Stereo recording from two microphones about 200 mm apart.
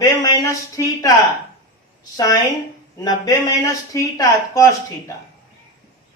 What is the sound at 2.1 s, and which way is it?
Speech, 15° left (ahead or behind).